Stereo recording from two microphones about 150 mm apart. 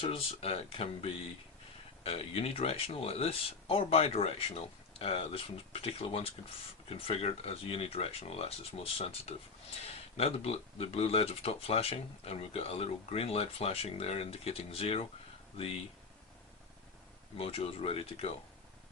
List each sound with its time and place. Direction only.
0.0 s speech: 40° left (ahead or behind)
17.3 s speech: 40° left (ahead or behind)